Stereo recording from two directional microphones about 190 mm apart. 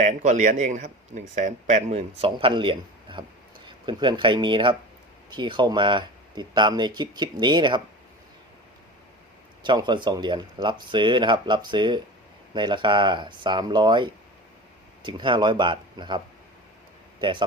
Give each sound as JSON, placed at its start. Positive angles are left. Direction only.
{"t": 0.0, "sound": "speech", "side_deg": -40}
{"t": 9.6, "sound": "speech", "side_deg": -25}